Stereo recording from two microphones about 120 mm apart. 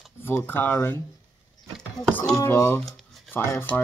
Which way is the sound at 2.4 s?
25° left (ahead or behind).